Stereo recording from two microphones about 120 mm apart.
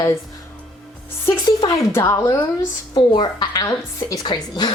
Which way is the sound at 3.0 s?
40° left (ahead or behind).